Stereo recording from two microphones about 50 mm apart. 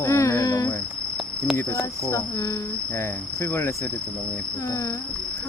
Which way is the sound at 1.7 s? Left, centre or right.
Left.